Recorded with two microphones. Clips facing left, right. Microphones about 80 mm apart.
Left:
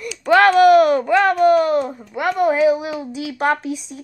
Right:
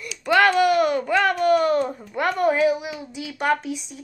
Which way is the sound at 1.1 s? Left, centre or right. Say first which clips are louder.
Left 5 dB; left.